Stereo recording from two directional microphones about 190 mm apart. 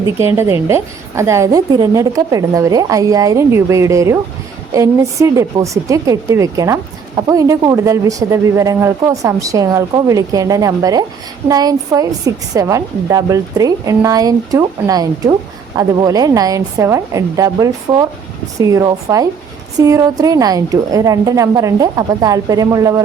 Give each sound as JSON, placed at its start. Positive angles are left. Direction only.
{"t": 0.0, "sound": "a woman's voice", "side_deg": -15}